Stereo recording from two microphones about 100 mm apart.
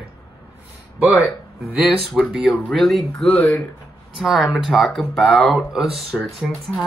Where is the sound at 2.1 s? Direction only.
Centre (ahead or behind).